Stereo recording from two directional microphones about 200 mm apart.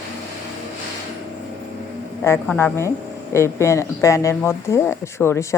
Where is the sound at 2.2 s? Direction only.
10° left (ahead or behind).